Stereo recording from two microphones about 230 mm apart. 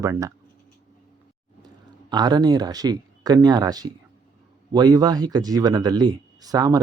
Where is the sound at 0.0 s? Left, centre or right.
Centre.